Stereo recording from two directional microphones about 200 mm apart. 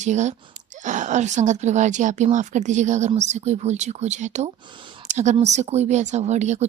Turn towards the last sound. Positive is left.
turn(degrees=-35)  # may be behind; listen again after turning